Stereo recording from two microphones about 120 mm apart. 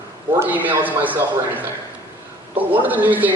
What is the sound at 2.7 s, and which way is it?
Speech, 15° right (ahead or behind).